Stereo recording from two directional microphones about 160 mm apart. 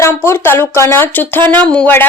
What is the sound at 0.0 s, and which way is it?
Speech, 15° left (ahead or behind).